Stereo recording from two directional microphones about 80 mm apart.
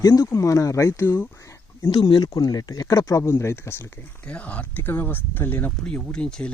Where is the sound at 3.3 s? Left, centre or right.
Left.